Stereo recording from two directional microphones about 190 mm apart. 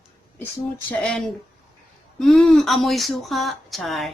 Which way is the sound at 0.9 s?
5° left (ahead or behind).